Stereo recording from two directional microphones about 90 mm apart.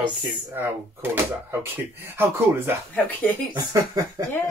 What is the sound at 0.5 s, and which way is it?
Speech, 25° right (ahead or behind).